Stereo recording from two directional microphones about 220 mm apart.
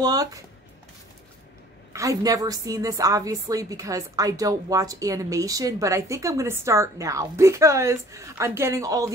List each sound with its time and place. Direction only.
0.0 s a woman's voice: 15° right (ahead or behind)
1.9 s a woman's voice: 15° right (ahead or behind)